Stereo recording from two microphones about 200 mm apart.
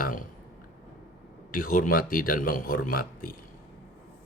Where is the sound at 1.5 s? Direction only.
45° left (ahead or behind).